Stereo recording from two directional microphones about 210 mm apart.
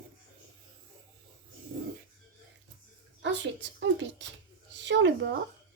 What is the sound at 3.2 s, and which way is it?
A woman's voice, 60° right (ahead or behind).